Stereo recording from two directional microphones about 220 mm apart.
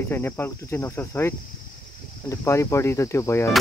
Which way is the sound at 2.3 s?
10° left (ahead or behind).